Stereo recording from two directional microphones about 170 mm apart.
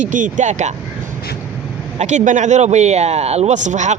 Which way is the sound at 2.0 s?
45° right (ahead or behind).